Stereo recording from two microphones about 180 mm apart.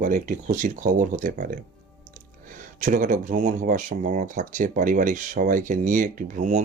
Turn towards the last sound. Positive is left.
turn(degrees=-45)  # may be behind; listen again after turning